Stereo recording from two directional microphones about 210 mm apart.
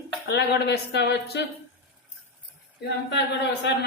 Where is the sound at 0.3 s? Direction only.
55° left (ahead or behind).